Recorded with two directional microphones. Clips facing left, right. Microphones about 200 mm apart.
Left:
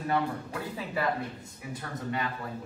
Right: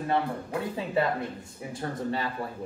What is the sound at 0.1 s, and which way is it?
Speech, 25° right (ahead or behind).